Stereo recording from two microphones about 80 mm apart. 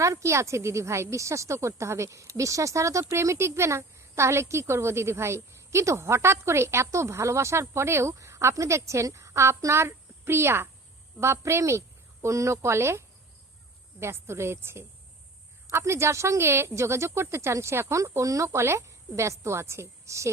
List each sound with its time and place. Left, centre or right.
0.0 s speech: right